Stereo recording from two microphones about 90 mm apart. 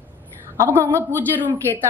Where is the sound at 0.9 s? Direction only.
25° right (ahead or behind).